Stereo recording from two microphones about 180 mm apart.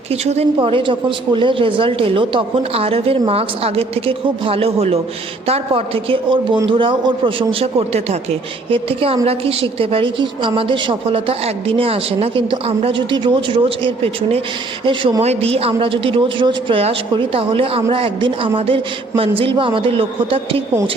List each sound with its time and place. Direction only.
0.1 s a man's voice: 35° right (ahead or behind)